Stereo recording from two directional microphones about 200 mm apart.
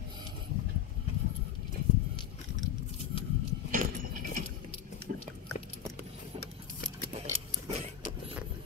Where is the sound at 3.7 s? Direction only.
40° right (ahead or behind).